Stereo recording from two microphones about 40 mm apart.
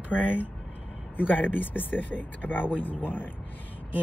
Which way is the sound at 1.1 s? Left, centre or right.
Left.